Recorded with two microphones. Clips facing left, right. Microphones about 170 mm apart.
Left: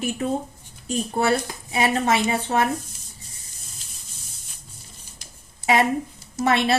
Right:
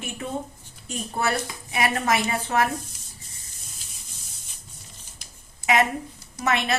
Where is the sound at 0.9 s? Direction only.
30° left (ahead or behind).